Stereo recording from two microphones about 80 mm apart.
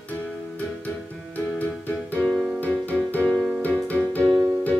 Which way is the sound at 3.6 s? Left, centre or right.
Centre.